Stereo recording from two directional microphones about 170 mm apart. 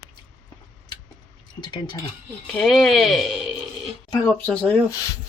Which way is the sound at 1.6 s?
25° left (ahead or behind).